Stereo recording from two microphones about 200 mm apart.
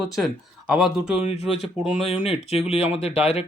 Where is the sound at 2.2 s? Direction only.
30° left (ahead or behind).